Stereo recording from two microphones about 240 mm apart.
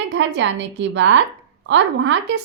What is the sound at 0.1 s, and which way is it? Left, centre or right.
A woman's voice, right.